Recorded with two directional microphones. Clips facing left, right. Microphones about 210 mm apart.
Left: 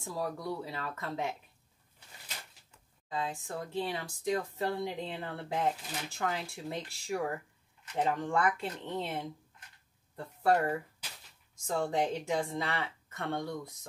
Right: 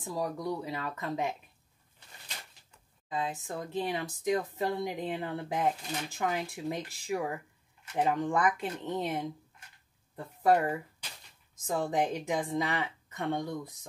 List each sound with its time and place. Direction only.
0.0 s speech: 15° right (ahead or behind)
3.1 s speech: 20° right (ahead or behind)